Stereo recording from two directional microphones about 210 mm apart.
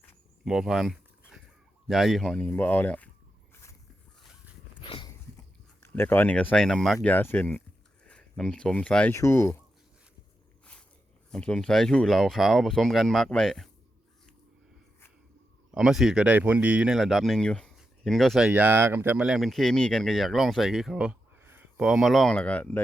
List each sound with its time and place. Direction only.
0.4 s speech: centre (ahead or behind)
3.5 s biting: 15° left (ahead or behind)
4.8 s dog: 20° left (ahead or behind)
5.8 s speech: 10° left (ahead or behind)
11.3 s speech: 5° left (ahead or behind)
15.7 s speech: centre (ahead or behind)